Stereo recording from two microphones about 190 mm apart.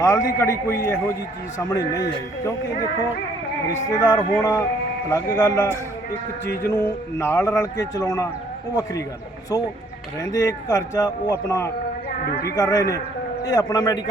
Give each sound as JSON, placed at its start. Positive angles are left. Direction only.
{"t": 0.0, "sound": "a man's voice", "side_deg": 15}
{"t": 3.9, "sound": "a man's voice", "side_deg": 15}
{"t": 10.2, "sound": "a man's voice", "side_deg": 15}